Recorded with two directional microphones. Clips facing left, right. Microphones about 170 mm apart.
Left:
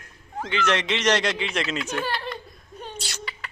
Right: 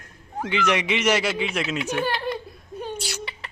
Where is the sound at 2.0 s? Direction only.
15° right (ahead or behind).